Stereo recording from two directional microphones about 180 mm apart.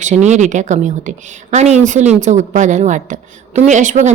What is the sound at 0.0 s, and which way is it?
A woman's voice, 40° right (ahead or behind).